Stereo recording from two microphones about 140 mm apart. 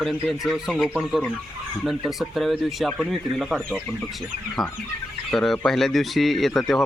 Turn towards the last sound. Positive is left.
turn(degrees=0)  # may be behind; listen again after turning